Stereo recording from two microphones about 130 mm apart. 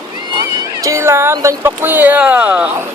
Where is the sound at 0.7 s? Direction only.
25° right (ahead or behind).